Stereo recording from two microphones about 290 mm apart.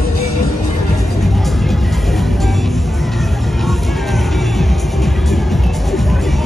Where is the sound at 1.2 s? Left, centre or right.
Centre.